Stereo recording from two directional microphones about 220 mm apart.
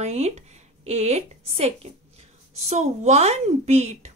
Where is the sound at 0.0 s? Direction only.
30° right (ahead or behind).